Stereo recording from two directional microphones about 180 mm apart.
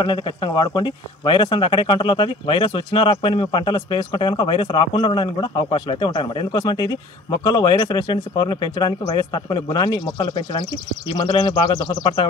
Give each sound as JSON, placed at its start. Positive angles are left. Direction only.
{"t": 0.0, "sound": "speech", "side_deg": 25}